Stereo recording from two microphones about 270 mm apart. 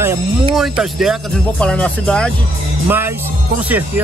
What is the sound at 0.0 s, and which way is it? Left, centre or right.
Speech, centre.